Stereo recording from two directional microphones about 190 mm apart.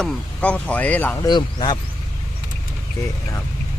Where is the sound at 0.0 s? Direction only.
5° left (ahead or behind).